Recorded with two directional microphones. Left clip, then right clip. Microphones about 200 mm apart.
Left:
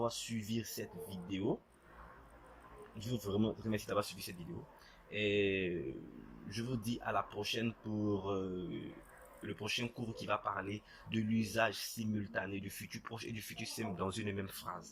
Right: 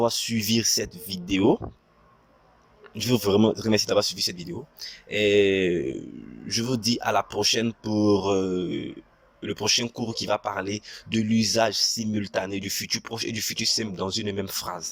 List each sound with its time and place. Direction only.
0.0 s speech: 40° right (ahead or behind)
3.0 s speech: 45° right (ahead or behind)